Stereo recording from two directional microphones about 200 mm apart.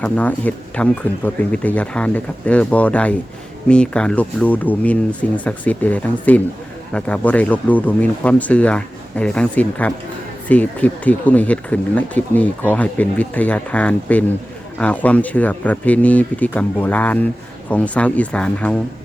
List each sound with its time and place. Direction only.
0.0 s speech: 10° left (ahead or behind)